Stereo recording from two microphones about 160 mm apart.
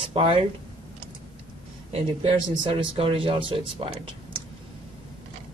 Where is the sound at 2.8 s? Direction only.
35° right (ahead or behind).